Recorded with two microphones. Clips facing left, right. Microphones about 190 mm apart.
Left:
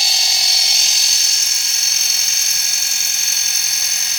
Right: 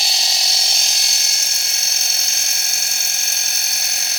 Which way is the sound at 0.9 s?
55° right (ahead or behind).